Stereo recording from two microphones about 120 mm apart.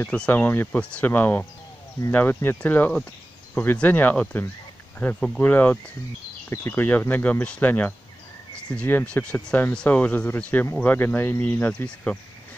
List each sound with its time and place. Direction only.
0.0 s speech: 10° left (ahead or behind)